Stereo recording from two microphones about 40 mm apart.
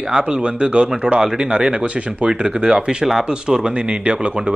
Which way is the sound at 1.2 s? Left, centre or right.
Centre.